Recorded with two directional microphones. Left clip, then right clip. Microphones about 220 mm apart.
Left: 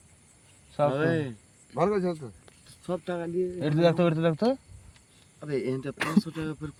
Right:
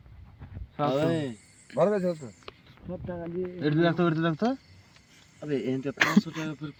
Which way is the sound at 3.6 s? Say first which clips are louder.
Left 1 dB; 45° left (ahead or behind).